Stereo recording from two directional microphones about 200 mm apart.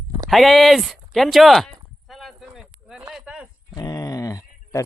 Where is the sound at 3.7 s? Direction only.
20° left (ahead or behind).